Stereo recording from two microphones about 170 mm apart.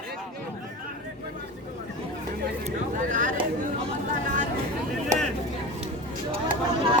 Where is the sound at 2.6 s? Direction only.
50° right (ahead or behind).